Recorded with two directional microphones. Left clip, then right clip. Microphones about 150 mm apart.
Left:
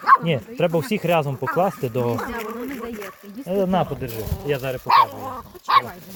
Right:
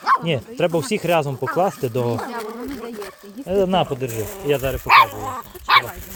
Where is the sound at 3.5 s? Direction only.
15° right (ahead or behind).